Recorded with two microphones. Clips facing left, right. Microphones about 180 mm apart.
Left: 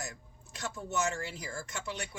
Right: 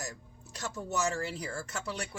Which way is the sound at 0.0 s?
40° right (ahead or behind).